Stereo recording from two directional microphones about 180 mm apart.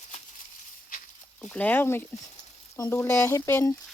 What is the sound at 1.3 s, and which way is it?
Speech, 5° left (ahead or behind).